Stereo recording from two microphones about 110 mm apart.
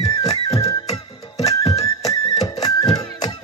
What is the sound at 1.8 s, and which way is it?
Music, 35° left (ahead or behind).